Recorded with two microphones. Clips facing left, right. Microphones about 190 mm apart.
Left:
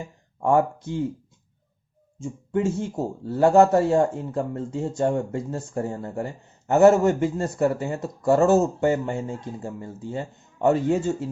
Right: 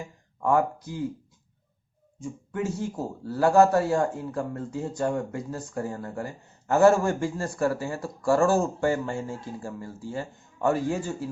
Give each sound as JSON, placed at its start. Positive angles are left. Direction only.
{"t": 0.3, "sound": "speech", "side_deg": 25}
{"t": 2.1, "sound": "speech", "side_deg": 25}